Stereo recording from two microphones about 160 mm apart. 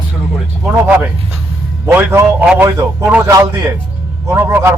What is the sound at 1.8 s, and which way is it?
A man's voice, 15° right (ahead or behind).